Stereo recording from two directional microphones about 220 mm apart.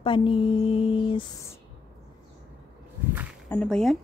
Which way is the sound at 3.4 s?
5° left (ahead or behind).